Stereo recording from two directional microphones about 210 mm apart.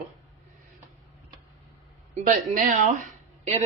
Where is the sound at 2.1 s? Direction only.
35° right (ahead or behind).